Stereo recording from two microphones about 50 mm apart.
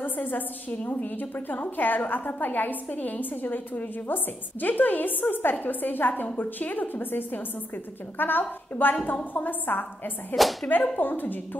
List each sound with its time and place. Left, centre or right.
0.0 s a woman's voice: left
10.3 s speech: centre
11.0 s a woman's voice: left